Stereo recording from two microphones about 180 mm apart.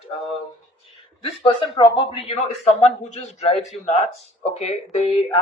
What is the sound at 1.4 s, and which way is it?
Speech, 25° left (ahead or behind).